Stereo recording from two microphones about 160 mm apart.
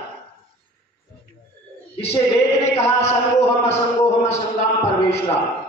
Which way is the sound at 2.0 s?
40° left (ahead or behind).